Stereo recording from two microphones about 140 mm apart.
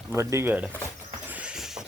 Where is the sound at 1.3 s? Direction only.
10° right (ahead or behind).